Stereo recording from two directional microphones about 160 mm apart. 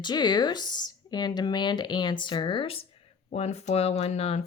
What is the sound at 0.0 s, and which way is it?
Speech, 25° left (ahead or behind).